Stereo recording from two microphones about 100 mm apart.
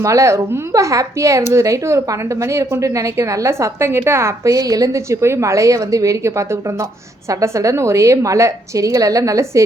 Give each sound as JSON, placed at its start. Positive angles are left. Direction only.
{"t": 0.0, "sound": "speech", "side_deg": -30}